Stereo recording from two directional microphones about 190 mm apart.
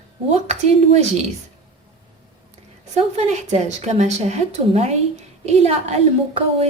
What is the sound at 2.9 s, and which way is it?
A woman's voice, 35° right (ahead or behind).